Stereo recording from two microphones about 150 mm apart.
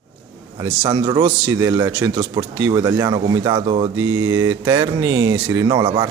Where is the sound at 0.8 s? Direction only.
30° right (ahead or behind).